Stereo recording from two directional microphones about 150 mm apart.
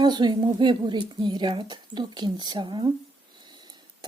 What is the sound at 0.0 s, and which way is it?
Speech, 30° right (ahead or behind).